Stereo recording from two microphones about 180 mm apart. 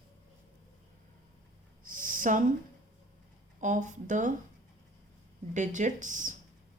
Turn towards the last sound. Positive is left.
turn(degrees=-45)  # may be behind; listen again after turning